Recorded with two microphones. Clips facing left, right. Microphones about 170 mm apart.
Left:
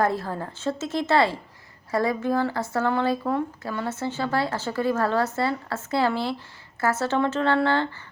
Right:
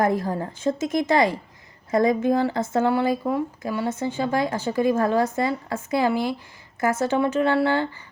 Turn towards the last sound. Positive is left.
turn(degrees=-15)  # may be behind; listen again after turning